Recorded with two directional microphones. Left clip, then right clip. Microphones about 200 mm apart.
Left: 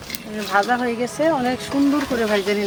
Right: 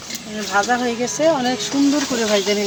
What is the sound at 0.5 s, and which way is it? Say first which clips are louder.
Speech: right 1 dB; 10° right (ahead or behind).